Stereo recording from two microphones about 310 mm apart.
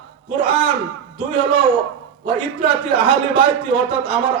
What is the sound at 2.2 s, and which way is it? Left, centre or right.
A man's voice, centre.